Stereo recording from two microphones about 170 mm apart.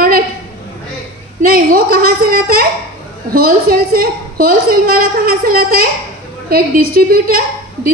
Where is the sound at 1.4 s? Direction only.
60° right (ahead or behind).